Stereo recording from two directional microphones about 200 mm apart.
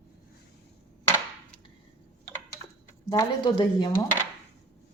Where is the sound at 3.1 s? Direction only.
20° left (ahead or behind).